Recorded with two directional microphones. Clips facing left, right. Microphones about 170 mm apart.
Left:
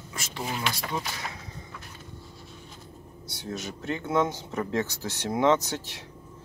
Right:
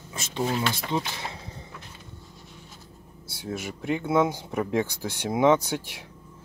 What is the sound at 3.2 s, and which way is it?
Speech, 10° right (ahead or behind).